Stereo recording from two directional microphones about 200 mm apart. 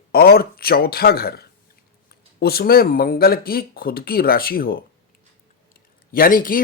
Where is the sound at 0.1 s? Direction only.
50° left (ahead or behind).